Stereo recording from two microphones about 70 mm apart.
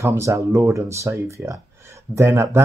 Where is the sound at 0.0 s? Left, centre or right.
Right.